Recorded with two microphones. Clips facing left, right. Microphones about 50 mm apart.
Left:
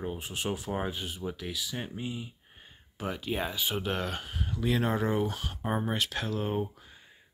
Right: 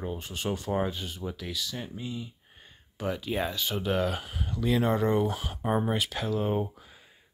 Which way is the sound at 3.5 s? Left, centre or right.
Centre.